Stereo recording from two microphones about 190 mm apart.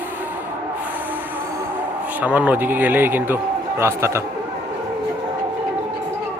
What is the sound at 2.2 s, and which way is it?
Speech, 10° right (ahead or behind).